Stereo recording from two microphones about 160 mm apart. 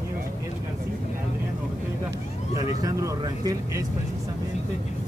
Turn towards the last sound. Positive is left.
turn(degrees=-20)  # may be behind; listen again after turning